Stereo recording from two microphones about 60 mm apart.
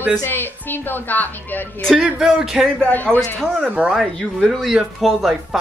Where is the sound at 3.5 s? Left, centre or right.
Right.